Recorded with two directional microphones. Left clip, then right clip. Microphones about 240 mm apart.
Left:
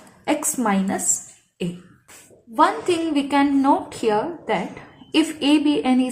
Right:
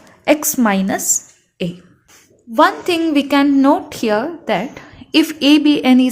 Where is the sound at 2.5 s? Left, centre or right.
Right.